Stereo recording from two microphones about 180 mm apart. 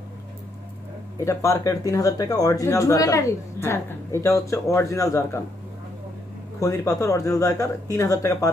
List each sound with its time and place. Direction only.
1.2 s speech: 15° left (ahead or behind)
6.6 s speech: 20° left (ahead or behind)